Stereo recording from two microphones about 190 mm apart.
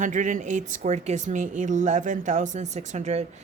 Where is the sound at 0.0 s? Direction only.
40° right (ahead or behind).